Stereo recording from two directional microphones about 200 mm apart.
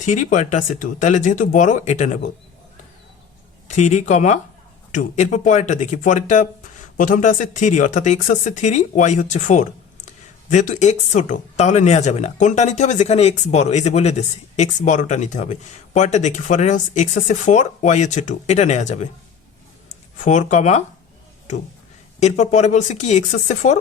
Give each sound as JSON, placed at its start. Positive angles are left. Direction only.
{"t": 0.0, "sound": "speech", "side_deg": 35}
{"t": 3.7, "sound": "speech", "side_deg": 35}
{"t": 20.2, "sound": "speech", "side_deg": 35}
{"t": 22.2, "sound": "speech", "side_deg": 35}